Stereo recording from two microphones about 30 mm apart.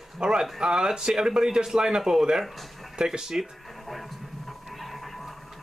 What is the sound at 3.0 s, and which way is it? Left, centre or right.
Speech, right.